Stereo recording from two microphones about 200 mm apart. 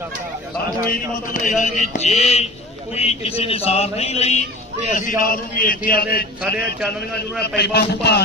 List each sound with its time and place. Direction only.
0.9 s a man's voice: 40° left (ahead or behind)
4.9 s a man's voice: 45° left (ahead or behind)